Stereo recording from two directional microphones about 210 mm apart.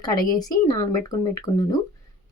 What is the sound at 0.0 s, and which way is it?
Speech, 20° left (ahead or behind).